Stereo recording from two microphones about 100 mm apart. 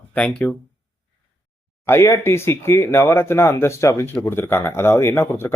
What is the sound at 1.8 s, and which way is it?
Speech, 25° left (ahead or behind).